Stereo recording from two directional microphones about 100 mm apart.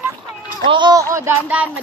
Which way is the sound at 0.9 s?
30° right (ahead or behind).